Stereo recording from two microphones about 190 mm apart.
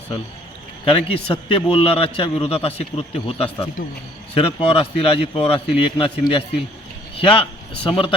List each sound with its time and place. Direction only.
0.9 s a man's voice: 30° left (ahead or behind)